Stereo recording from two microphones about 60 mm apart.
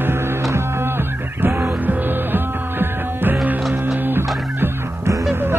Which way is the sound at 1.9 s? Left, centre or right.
Right.